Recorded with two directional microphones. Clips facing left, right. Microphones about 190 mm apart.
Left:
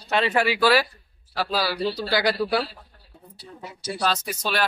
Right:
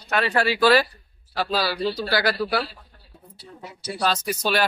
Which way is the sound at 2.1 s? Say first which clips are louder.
Left 2 dB; 20° left (ahead or behind).